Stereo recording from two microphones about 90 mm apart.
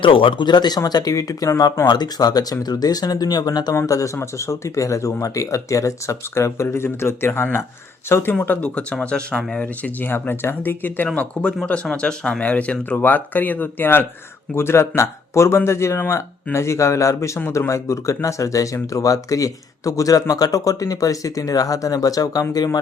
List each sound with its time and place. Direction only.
0.0 s speech: 75° left (ahead or behind); by 1.8 s 40° left (ahead or behind)
1.9 s speech: 50° left (ahead or behind)
3.8 s speech: 40° left (ahead or behind)